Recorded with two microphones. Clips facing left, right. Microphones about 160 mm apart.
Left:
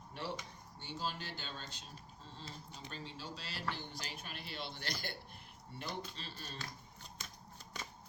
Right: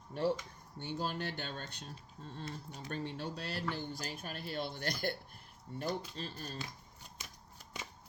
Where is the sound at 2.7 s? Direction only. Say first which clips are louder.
Right 9 dB; 60° right (ahead or behind).